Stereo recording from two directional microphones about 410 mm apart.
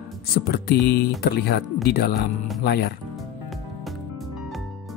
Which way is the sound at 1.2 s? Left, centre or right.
Left.